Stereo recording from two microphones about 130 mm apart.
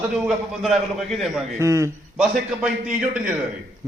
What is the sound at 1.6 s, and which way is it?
Speech, 25° right (ahead or behind).